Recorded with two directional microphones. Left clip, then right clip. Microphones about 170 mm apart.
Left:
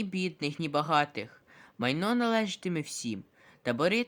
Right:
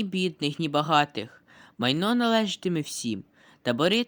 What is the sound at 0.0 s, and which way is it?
Speech, 20° right (ahead or behind).